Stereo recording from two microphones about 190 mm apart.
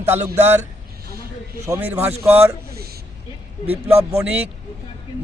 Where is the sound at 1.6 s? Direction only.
10° right (ahead or behind).